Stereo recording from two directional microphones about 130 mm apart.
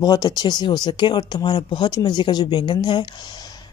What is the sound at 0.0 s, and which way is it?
Speech, 30° left (ahead or behind).